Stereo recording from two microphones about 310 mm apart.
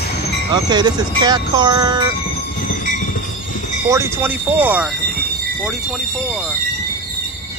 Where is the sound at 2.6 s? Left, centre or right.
Left.